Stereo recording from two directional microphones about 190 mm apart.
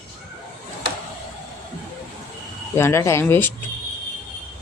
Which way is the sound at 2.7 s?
15° left (ahead or behind).